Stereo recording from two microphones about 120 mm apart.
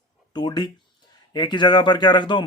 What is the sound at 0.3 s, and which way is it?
Speech, 35° left (ahead or behind).